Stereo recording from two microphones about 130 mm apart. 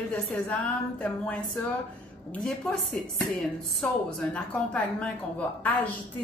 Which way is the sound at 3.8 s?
10° left (ahead or behind).